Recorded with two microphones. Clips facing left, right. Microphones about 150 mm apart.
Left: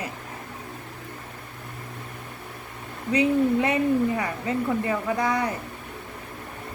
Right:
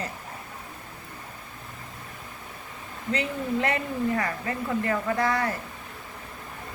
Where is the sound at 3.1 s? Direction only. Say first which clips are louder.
Left 8 dB; 15° left (ahead or behind).